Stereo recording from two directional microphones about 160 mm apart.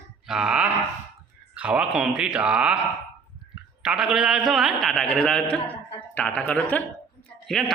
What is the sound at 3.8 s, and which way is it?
A man's voice, 5° right (ahead or behind).